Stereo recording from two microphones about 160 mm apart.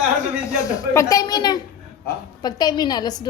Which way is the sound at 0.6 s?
20° left (ahead or behind).